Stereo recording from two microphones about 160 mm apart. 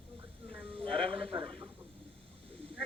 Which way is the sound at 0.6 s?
35° right (ahead or behind).